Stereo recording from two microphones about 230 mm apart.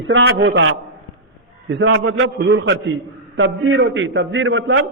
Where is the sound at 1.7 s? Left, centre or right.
Right.